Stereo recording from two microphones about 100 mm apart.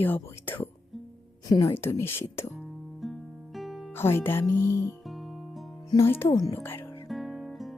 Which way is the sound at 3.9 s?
25° left (ahead or behind).